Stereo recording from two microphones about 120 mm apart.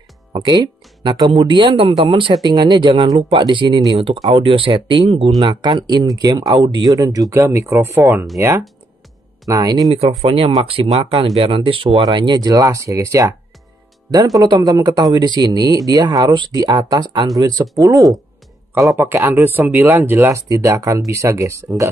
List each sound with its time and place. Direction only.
0.3 s speech: 40° right (ahead or behind)
9.9 s speech: 55° right (ahead or behind); by 21.6 s 25° right (ahead or behind)